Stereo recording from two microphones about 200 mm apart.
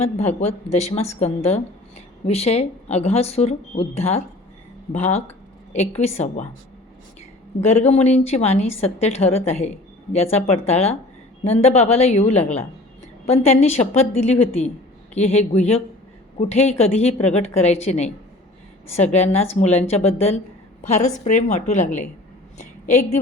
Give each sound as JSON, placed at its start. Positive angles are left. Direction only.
{"t": 0.0, "sound": "a woman's voice", "side_deg": 35}
{"t": 7.8, "sound": "a woman's voice", "side_deg": 30}
{"t": 22.5, "sound": "a sound", "side_deg": 35}